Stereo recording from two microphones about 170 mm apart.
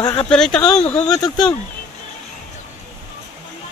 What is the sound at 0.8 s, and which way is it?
Speech, 40° left (ahead or behind).